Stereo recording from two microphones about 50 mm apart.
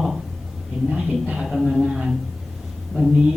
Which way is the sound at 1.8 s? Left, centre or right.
Centre.